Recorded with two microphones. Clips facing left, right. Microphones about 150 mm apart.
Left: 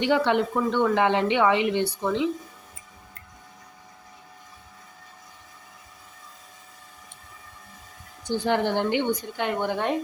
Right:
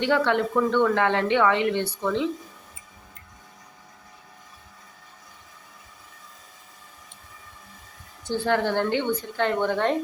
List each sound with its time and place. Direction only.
0.0 s a woman's voice: 15° left (ahead or behind)
8.2 s a woman's voice: 15° left (ahead or behind)